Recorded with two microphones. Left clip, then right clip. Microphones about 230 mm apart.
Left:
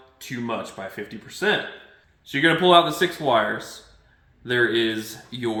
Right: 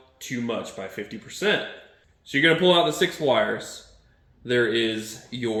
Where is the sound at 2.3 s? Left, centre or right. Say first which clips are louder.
Left 2 dB; centre.